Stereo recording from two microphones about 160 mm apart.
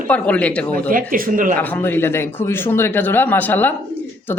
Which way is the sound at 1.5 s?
10° left (ahead or behind).